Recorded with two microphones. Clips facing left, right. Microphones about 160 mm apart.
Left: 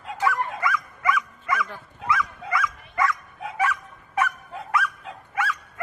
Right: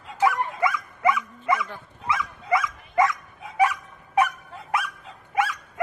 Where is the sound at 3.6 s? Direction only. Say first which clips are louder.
Right 4 dB; 15° right (ahead or behind).